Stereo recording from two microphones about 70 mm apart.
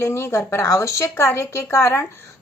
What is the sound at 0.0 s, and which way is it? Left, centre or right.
Speech, left.